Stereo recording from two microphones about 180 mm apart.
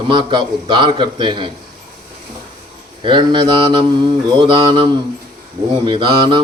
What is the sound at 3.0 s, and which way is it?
A man's voice, 25° right (ahead or behind).